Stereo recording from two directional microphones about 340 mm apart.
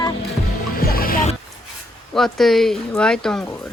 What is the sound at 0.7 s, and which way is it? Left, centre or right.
Music, left.